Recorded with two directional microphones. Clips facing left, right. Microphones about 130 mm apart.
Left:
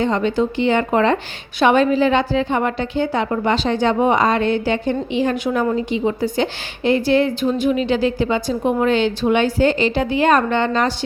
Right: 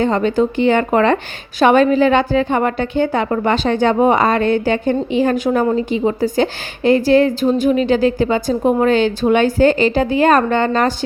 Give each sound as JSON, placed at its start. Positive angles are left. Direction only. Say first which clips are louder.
{"t": 0.0, "sound": "a woman's voice", "louder": "right 3 dB", "side_deg": -45}